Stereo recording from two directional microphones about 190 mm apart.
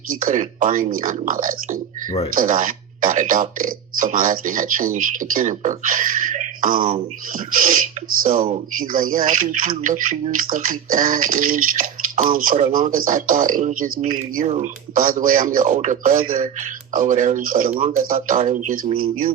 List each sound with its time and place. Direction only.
0.2 s a man's voice: 45° right (ahead or behind)
14.4 s speech: 35° right (ahead or behind)
14.9 s a man's voice: 45° right (ahead or behind)